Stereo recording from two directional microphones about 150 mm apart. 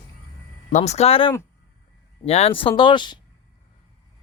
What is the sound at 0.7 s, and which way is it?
A man's voice, 50° left (ahead or behind).